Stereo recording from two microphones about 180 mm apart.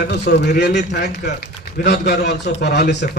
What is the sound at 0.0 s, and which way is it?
A man's voice, 65° left (ahead or behind).